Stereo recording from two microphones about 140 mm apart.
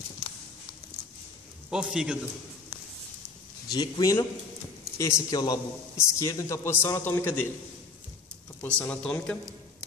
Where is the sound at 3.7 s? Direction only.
25° left (ahead or behind).